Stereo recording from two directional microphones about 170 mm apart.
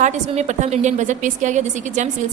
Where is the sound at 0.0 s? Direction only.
45° right (ahead or behind).